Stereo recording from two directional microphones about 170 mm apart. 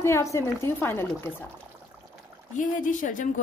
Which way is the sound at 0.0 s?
15° left (ahead or behind).